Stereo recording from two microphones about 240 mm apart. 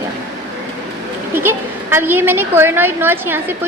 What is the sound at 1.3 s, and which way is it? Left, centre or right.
A woman's voice, centre.